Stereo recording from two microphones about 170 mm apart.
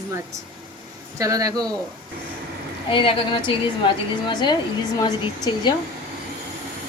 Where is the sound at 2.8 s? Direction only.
30° left (ahead or behind).